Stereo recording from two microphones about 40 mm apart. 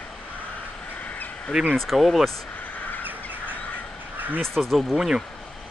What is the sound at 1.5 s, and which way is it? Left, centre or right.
Speech, centre.